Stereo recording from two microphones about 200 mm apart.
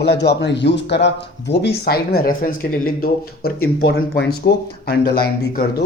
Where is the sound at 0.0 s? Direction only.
55° left (ahead or behind).